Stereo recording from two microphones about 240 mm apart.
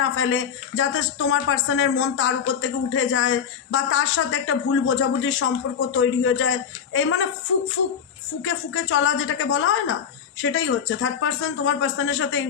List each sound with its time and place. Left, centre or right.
0.0 s speech: left
8.4 s speech: left